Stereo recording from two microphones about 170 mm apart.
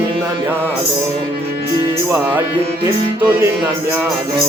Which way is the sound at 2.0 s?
10° right (ahead or behind).